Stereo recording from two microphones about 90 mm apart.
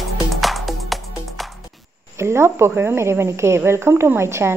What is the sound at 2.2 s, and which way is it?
A woman's voice, 30° right (ahead or behind).